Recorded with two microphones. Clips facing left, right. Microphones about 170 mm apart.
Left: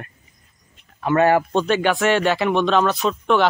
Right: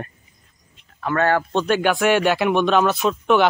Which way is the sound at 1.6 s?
Centre (ahead or behind).